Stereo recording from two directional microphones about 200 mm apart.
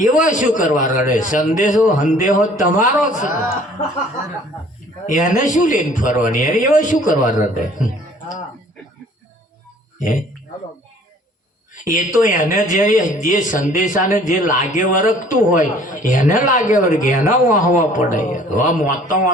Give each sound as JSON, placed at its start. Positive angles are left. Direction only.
{"t": 0.0, "sound": "a man's voice", "side_deg": 40}
{"t": 5.0, "sound": "a man's voice", "side_deg": 40}
{"t": 10.0, "sound": "a man's voice", "side_deg": 40}
{"t": 11.7, "sound": "a man's voice", "side_deg": 40}